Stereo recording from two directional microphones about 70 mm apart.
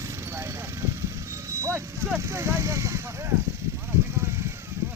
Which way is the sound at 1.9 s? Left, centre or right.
Right.